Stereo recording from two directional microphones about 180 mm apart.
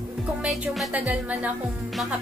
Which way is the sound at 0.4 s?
5° right (ahead or behind).